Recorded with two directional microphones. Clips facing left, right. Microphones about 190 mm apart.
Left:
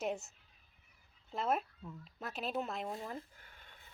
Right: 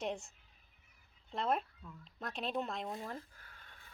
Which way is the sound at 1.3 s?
5° left (ahead or behind).